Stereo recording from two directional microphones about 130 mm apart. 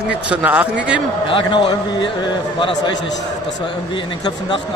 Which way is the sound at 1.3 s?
40° left (ahead or behind).